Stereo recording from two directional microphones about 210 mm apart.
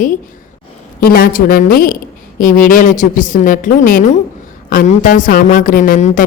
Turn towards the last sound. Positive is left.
turn(degrees=35)  # may be behind; listen again after turning